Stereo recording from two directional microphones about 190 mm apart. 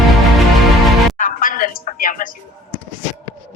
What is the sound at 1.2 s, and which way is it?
Music, 45° left (ahead or behind).